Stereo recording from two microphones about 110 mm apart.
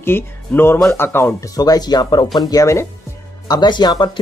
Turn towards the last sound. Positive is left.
turn(degrees=40)  # may be behind; listen again after turning